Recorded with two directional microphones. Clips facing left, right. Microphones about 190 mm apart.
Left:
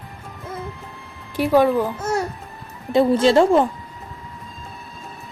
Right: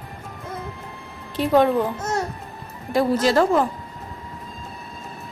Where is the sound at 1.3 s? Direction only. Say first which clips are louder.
Left 1 dB; 10° left (ahead or behind).